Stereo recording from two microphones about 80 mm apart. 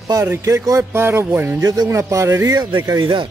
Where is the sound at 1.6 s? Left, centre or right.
Right.